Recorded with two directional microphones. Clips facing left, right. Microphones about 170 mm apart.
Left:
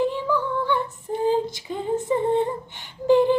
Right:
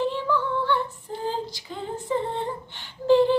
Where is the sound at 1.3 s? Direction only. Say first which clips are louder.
Left 8 dB; 20° left (ahead or behind).